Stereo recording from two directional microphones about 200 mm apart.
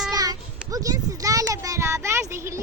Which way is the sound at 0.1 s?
20° right (ahead or behind).